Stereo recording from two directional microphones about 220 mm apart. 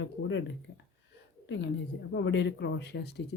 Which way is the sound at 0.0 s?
55° left (ahead or behind).